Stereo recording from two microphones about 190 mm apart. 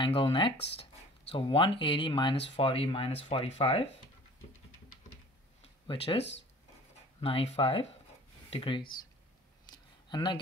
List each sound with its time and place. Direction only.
0.0 s speech: 25° left (ahead or behind)
5.6 s a sound: 30° left (ahead or behind)
7.2 s speech: 30° left (ahead or behind)
10.0 s speech: 25° left (ahead or behind)